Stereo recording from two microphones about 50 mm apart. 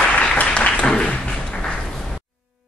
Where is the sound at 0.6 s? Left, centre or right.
Left.